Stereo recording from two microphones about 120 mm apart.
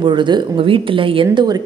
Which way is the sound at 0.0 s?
40° right (ahead or behind).